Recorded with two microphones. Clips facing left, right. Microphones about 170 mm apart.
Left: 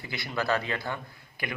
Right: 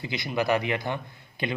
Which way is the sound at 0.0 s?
20° right (ahead or behind).